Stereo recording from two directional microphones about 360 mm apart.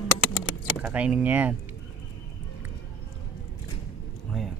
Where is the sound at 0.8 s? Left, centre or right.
Centre.